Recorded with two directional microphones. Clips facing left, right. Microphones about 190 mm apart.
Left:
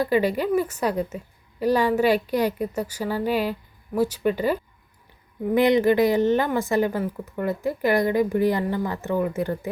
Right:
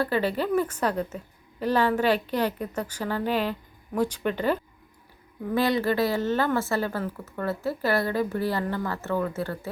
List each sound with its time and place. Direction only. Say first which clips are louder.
0.0 s a woman's voice: left 4 dB; 15° left (ahead or behind)